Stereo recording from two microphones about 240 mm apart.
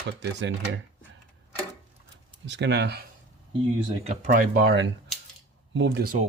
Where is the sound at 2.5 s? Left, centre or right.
Right.